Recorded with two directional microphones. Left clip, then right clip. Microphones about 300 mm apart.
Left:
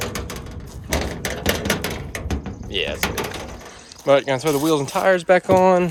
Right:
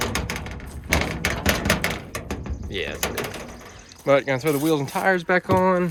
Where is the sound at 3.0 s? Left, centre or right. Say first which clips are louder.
Left 3 dB; left.